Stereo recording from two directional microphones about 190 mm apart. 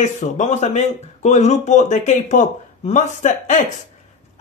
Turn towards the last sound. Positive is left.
turn(degrees=40)  # may be behind; listen again after turning